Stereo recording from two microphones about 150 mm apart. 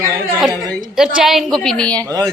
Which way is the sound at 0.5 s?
25° right (ahead or behind).